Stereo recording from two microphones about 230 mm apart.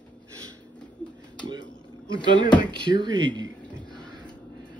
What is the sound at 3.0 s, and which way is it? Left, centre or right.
Speech, centre.